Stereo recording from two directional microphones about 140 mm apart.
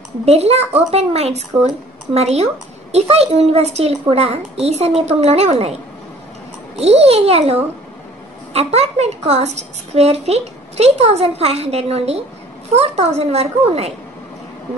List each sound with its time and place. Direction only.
0.2 s a woman's voice: 50° right (ahead or behind)
6.8 s a woman's voice: 50° right (ahead or behind)
8.5 s a woman's voice: 50° right (ahead or behind)